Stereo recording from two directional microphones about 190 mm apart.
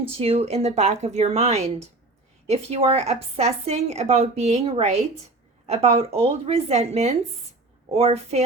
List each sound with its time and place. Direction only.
0.1 s a woman's voice: 30° right (ahead or behind)